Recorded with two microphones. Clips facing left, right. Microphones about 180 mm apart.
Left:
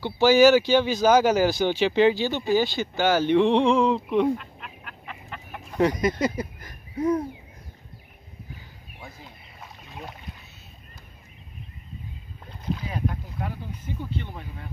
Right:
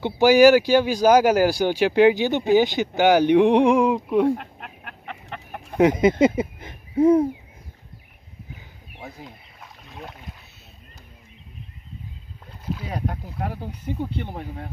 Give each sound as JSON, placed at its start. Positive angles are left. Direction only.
{"t": 0.0, "sound": "speech", "side_deg": -15}
{"t": 4.4, "sound": "duck", "side_deg": -60}
{"t": 5.8, "sound": "speech", "side_deg": -20}
{"t": 9.6, "sound": "rowboat", "side_deg": 0}
{"t": 12.9, "sound": "speech", "side_deg": -65}